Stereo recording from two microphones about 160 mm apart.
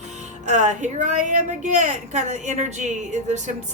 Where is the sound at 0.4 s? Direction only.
50° right (ahead or behind).